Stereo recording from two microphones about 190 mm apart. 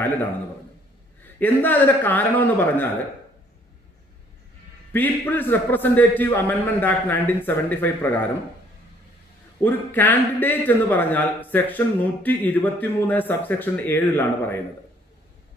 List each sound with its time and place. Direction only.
1.4 s a man's voice: 10° left (ahead or behind)
4.9 s a man's voice: 10° left (ahead or behind)
9.6 s a man's voice: 10° left (ahead or behind)